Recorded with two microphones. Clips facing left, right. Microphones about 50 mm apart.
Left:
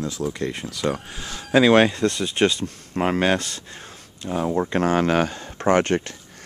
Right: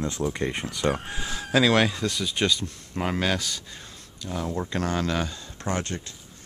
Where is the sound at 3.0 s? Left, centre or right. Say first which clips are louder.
Left 6 dB; centre.